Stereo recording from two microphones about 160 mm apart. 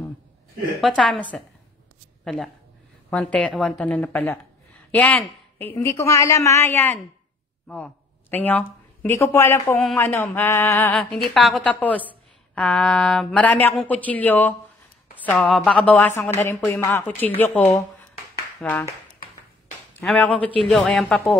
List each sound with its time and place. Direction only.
0.7 s a woman's voice: centre (ahead or behind)
2.2 s a woman's voice: centre (ahead or behind)
20.0 s a woman's voice: 5° left (ahead or behind)